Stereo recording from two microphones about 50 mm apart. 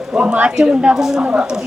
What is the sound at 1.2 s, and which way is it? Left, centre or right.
Speech, right.